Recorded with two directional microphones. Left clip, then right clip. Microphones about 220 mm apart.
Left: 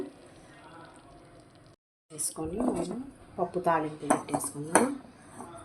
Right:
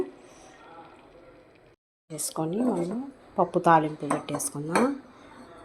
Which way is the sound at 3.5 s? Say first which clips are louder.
Right 7 dB; 30° right (ahead or behind).